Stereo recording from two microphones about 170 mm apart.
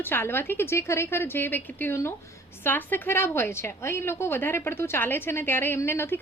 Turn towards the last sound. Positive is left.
turn(degrees=15)  # may be behind; listen again after turning